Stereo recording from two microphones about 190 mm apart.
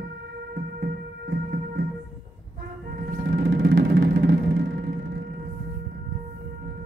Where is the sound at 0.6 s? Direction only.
60° right (ahead or behind).